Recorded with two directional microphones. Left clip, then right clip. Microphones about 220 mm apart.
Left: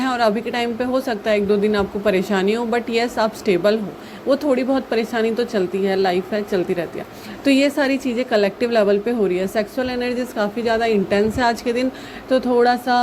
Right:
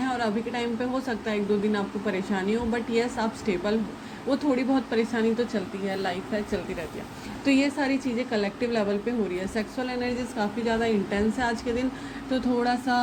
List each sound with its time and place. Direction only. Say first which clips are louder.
0.0 s a woman's voice: left 9 dB; 45° left (ahead or behind)